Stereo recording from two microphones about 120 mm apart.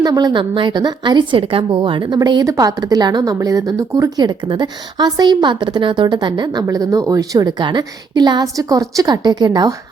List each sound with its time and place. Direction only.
0.0 s a woman's voice: 35° right (ahead or behind)